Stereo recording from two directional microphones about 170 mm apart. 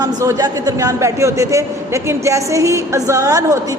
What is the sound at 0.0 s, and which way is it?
A man's voice, 20° right (ahead or behind).